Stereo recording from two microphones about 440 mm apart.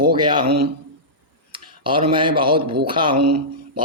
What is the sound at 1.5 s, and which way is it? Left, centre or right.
Speech, centre.